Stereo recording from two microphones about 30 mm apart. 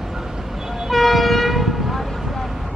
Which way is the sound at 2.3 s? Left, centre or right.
Centre.